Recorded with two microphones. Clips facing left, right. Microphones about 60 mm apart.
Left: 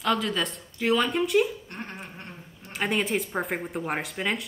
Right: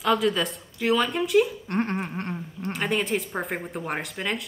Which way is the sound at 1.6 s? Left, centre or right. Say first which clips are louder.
Right 11 dB; right.